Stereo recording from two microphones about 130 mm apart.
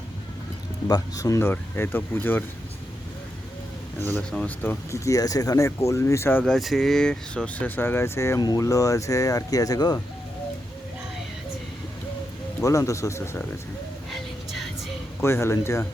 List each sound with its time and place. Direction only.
0.9 s speech: 30° left (ahead or behind)
4.3 s speech: 10° left (ahead or behind)
6.4 s speech: centre (ahead or behind); by 10.0 s 30° left (ahead or behind)
12.6 s speech: 25° left (ahead or behind)
14.1 s a sound: centre (ahead or behind)
15.2 s speech: 20° left (ahead or behind)